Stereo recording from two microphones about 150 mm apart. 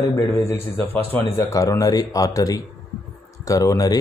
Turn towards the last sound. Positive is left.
turn(degrees=25)  # may be behind; listen again after turning